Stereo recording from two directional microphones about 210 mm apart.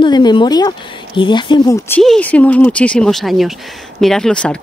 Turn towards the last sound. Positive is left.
turn(degrees=5)  # may be behind; listen again after turning